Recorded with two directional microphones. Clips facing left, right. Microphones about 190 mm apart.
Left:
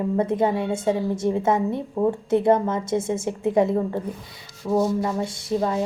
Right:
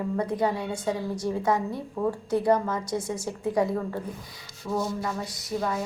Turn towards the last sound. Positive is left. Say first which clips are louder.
# left 6 dB
turn(degrees=30)  # may be behind; listen again after turning